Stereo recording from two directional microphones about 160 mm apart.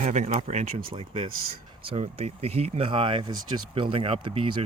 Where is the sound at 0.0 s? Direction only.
50° right (ahead or behind).